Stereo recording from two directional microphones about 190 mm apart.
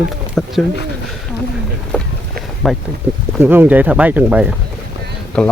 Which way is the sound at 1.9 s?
5° left (ahead or behind).